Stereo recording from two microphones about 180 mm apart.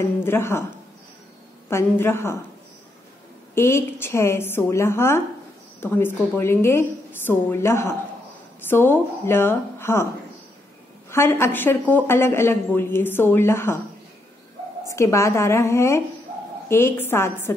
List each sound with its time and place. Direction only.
0.2 s a woman's voice: 15° left (ahead or behind)
1.7 s a woman's voice: 15° left (ahead or behind)
3.5 s a woman's voice: 15° left (ahead or behind)
11.1 s a woman's voice: 15° left (ahead or behind)
14.9 s a woman's voice: 15° left (ahead or behind)